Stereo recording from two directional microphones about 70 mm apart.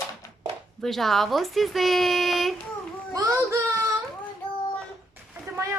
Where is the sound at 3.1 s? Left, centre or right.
Right.